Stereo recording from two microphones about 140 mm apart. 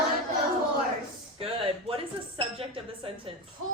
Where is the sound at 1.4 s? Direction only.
40° right (ahead or behind).